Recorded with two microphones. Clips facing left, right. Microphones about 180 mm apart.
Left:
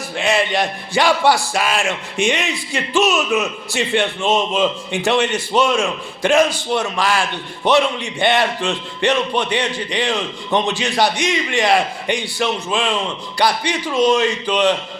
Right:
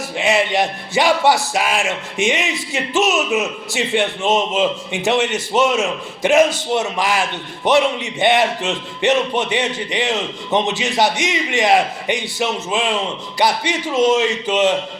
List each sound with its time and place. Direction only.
0.2 s a man's voice: 20° right (ahead or behind)